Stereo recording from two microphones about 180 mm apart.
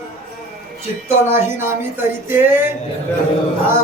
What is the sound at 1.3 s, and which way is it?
Speech, 15° right (ahead or behind).